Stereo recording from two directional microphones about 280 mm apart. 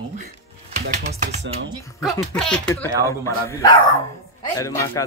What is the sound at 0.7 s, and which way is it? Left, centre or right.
Speech, right.